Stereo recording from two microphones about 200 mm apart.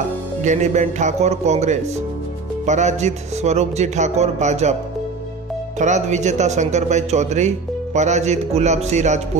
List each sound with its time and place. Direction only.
0.4 s speech: 35° right (ahead or behind)
5.8 s speech: 35° right (ahead or behind)